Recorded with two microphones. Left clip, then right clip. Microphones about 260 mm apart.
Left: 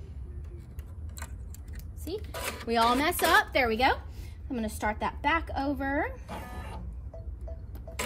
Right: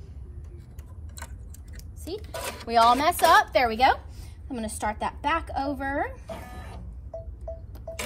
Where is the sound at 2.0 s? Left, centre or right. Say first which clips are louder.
Right 1 dB; centre.